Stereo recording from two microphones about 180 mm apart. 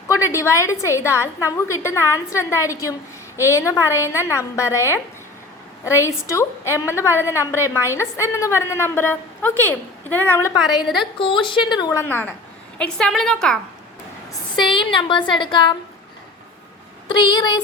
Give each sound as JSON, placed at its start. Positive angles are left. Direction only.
{"t": 0.1, "sound": "a woman's voice", "side_deg": 15}
{"t": 11.2, "sound": "speech", "side_deg": 30}
{"t": 11.8, "sound": "a woman's voice", "side_deg": 15}
{"t": 14.5, "sound": "speech", "side_deg": 25}
{"t": 17.1, "sound": "speech", "side_deg": 25}